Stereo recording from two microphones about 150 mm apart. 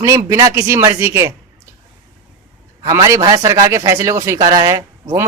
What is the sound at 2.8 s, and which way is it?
A man's voice, 20° right (ahead or behind).